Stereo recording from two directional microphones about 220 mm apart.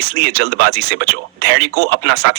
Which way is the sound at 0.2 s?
45° right (ahead or behind).